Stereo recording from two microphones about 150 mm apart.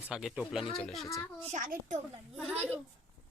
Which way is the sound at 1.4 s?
55° right (ahead or behind).